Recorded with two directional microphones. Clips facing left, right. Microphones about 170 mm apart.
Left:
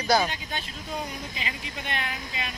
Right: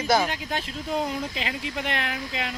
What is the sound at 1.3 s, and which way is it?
Speech, 90° right.